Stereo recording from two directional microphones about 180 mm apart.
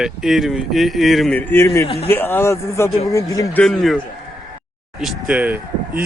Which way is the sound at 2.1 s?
10° left (ahead or behind).